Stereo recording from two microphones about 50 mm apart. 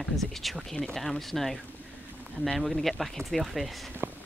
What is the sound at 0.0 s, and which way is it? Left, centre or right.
Speech, centre.